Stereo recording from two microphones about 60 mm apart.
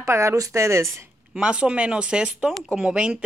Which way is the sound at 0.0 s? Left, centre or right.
Right.